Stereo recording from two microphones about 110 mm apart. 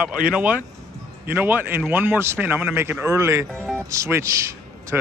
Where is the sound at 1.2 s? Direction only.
15° right (ahead or behind).